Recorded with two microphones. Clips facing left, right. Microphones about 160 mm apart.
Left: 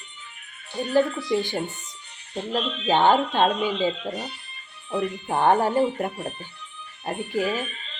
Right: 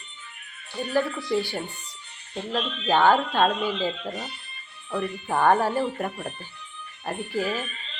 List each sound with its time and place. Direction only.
0.9 s speech: 20° left (ahead or behind)